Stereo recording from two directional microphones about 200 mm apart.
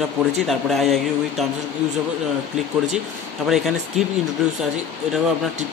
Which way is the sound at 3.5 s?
Centre (ahead or behind).